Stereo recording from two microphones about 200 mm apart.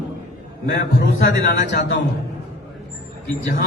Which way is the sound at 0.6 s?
55° left (ahead or behind).